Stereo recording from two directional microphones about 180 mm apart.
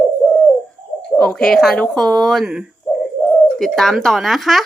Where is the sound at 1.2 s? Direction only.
Centre (ahead or behind).